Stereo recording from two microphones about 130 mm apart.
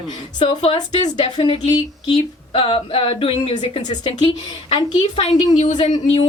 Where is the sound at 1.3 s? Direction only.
40° left (ahead or behind).